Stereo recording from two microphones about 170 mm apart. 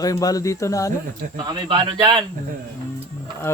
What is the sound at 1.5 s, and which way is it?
Speech, 30° right (ahead or behind).